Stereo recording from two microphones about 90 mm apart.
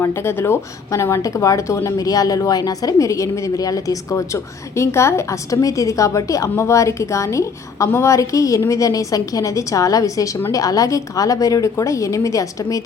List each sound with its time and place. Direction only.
0.0 s speech: 30° left (ahead or behind)